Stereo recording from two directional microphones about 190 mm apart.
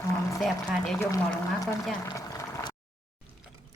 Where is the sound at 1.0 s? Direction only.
15° left (ahead or behind).